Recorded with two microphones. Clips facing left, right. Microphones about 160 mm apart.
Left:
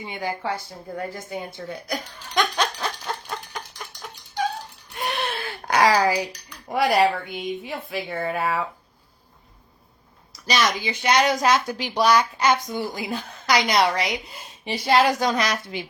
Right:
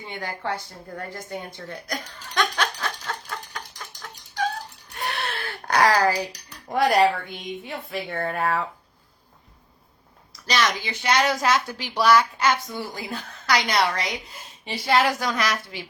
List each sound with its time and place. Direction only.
0.1 s a woman's voice: 10° left (ahead or behind)
4.9 s a sound: 20° left (ahead or behind)
6.7 s a woman's voice: 5° left (ahead or behind)
10.4 s a woman's voice: 10° left (ahead or behind)